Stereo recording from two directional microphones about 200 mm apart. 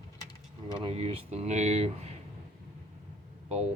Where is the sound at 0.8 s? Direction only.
30° right (ahead or behind).